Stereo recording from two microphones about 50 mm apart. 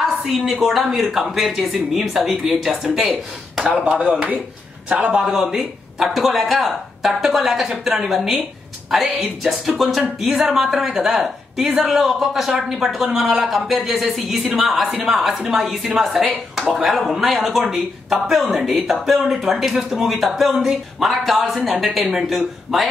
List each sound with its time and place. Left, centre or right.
0.0 s a woman's voice: centre
3.6 s a man's voice: right
5.2 s speech: centre
11.7 s a man's voice: right
12.0 s speech: centre